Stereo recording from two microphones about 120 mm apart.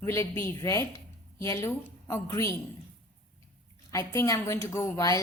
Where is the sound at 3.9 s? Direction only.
25° left (ahead or behind).